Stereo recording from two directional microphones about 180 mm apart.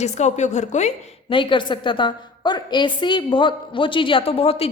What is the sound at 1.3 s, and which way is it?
A woman's voice, 25° left (ahead or behind).